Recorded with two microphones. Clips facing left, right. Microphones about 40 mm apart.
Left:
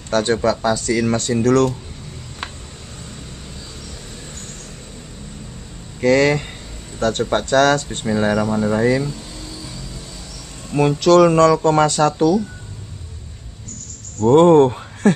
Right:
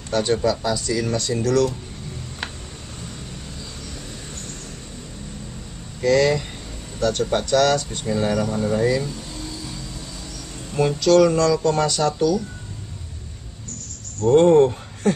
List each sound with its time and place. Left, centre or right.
0.1 s speech: left
5.9 s speech: left
8.4 s speech: left
10.7 s speech: left
14.2 s speech: left